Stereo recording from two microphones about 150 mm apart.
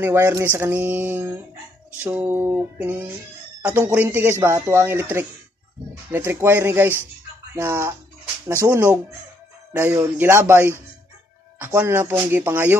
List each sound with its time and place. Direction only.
0.0 s speech: 15° right (ahead or behind)